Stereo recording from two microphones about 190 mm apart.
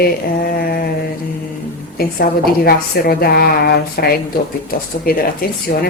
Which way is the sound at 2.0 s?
50° left (ahead or behind).